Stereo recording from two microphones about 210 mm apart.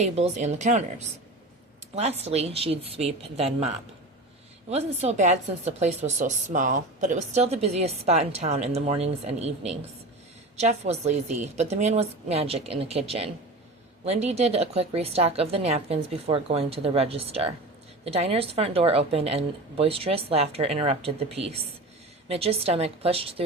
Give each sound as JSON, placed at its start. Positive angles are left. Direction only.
{"t": 0.0, "sound": "a woman's voice", "side_deg": -35}
{"t": 4.7, "sound": "a woman's voice", "side_deg": -30}